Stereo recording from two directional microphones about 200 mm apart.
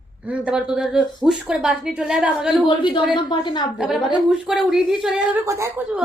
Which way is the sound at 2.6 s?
25° left (ahead or behind).